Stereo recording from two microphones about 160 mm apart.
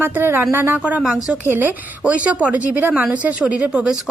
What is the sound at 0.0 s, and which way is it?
A woman's voice, 15° right (ahead or behind).